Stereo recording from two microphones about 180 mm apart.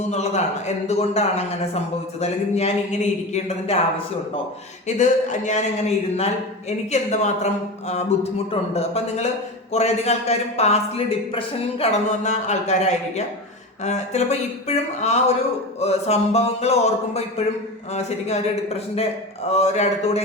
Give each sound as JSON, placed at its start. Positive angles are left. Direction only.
{"t": 0.1, "sound": "a man's voice", "side_deg": 40}
{"t": 4.9, "sound": "a man's voice", "side_deg": 40}